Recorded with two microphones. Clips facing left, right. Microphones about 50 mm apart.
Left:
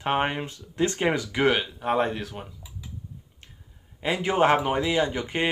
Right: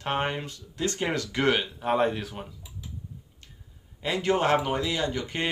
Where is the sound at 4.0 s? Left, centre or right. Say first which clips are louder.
Left 3 dB; centre.